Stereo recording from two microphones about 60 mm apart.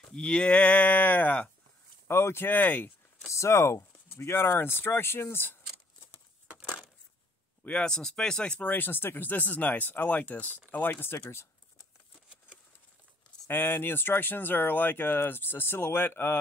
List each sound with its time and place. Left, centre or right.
0.1 s speech: centre
2.0 s speech: left
2.5 s speech: left
3.3 s speech: left
7.6 s speech: centre
8.6 s speech: left
11.1 s speech: left
13.5 s speech: left